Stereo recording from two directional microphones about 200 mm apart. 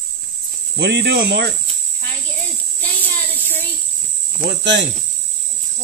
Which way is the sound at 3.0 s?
10° left (ahead or behind).